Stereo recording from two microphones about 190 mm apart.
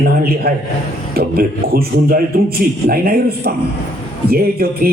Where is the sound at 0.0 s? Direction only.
55° right (ahead or behind).